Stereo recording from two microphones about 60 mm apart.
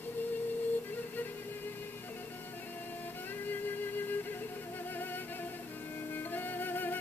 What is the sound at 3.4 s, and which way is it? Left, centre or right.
Music, left.